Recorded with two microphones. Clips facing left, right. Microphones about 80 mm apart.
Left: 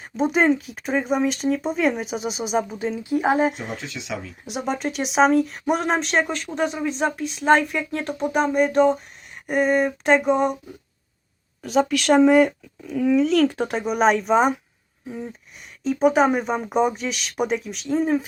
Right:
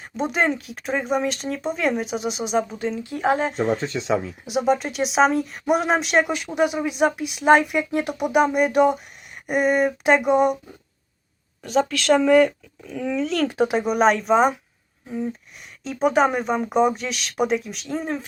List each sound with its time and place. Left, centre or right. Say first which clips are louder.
0.2 s speech: left 3 dB; centre
3.8 s speech: right 8 dB; right
4.4 s speech: right 4 dB; centre
12.1 s speech: left 1 dB; centre
12.8 s speech: left 6 dB; centre